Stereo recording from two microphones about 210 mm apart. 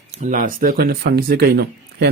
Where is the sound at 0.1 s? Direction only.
35° right (ahead or behind).